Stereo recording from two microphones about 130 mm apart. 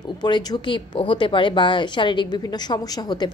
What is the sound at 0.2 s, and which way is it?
A woman's voice, 35° left (ahead or behind).